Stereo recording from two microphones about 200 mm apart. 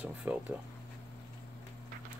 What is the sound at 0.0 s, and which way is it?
Speech, 5° right (ahead or behind).